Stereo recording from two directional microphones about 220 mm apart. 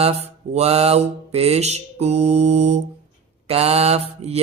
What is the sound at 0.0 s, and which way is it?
Mantra, 30° right (ahead or behind).